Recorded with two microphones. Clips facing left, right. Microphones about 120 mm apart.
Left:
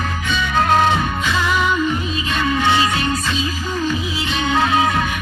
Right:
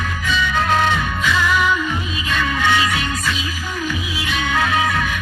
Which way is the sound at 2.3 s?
25° left (ahead or behind).